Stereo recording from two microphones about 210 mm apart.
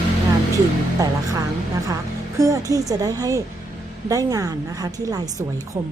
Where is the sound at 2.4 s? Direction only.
15° right (ahead or behind).